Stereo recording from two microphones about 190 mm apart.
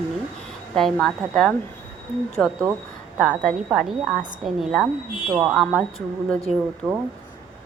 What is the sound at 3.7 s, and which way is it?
Speech, 5° right (ahead or behind).